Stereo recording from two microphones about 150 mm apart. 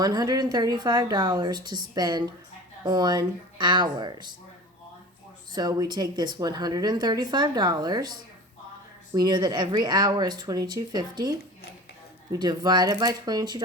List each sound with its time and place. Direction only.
0.0 s speech: 25° right (ahead or behind)
5.5 s speech: 25° right (ahead or behind)
9.1 s speech: 30° right (ahead or behind)